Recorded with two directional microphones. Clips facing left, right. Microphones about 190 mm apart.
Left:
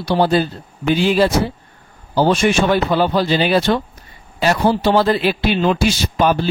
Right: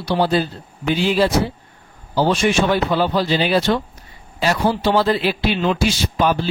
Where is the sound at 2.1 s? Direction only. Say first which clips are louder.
Left 2 dB; 50° left (ahead or behind).